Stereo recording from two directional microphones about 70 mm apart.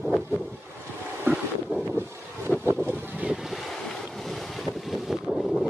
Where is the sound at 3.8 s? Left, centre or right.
Centre.